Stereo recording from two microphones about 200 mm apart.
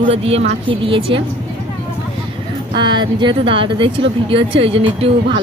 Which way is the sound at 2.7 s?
25° right (ahead or behind).